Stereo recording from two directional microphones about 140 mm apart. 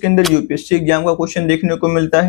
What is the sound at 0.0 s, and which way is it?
Speech, 10° left (ahead or behind).